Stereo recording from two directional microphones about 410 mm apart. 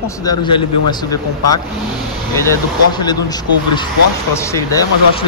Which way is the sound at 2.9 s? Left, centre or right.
Centre.